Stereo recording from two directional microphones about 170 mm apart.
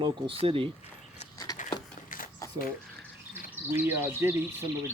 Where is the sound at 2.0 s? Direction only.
55° left (ahead or behind).